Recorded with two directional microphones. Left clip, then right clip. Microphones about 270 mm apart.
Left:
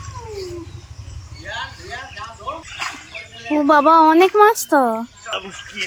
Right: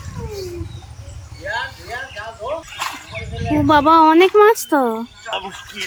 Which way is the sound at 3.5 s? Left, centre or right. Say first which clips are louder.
Even; centre.